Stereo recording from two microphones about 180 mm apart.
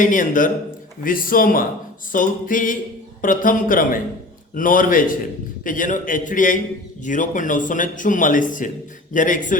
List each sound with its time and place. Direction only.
0.0 s a man's voice: 45° left (ahead or behind)